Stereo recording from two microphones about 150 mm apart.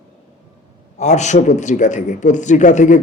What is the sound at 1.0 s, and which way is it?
A man's voice, 50° left (ahead or behind).